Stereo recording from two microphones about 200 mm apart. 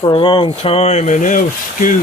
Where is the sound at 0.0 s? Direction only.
25° left (ahead or behind).